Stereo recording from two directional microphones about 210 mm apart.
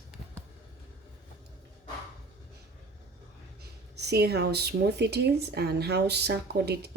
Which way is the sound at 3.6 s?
50° right (ahead or behind).